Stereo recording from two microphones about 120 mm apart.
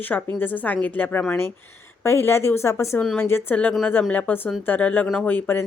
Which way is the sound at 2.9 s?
10° left (ahead or behind).